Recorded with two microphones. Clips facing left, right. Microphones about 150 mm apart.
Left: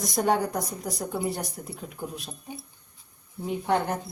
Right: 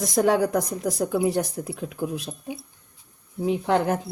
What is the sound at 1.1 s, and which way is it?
Speech, 90° right.